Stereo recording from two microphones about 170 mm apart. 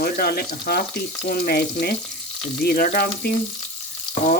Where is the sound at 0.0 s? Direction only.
65° left (ahead or behind).